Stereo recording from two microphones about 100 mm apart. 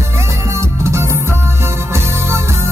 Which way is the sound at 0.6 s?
30° right (ahead or behind).